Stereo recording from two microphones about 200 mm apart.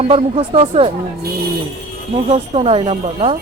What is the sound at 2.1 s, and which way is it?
Speech, 30° right (ahead or behind).